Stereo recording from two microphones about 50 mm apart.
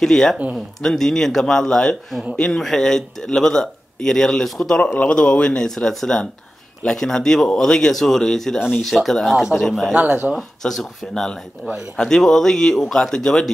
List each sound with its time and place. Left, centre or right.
0.0 s speech: centre
4.9 s speech: left; by 9.9 s centre
9.9 s speech: right
10.3 s speech: centre